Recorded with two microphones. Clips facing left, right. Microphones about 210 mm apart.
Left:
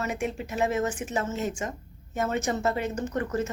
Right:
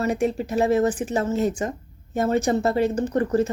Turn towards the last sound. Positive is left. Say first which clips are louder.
# right 7 dB
turn(degrees=-35)  # may be behind; listen again after turning